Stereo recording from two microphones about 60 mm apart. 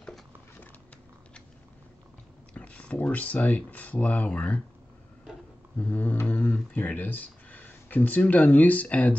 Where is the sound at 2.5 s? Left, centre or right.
Left.